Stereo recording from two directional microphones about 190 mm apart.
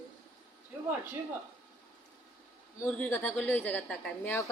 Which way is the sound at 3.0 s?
10° left (ahead or behind).